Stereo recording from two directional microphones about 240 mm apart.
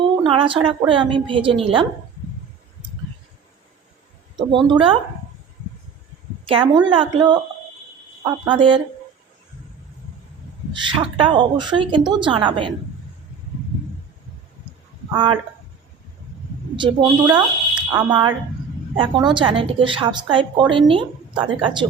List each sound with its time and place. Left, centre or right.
0.3 s a woman's voice: right
4.4 s a woman's voice: centre
6.4 s a woman's voice: right
10.7 s a woman's voice: centre
15.1 s speech: centre
16.7 s a woman's voice: centre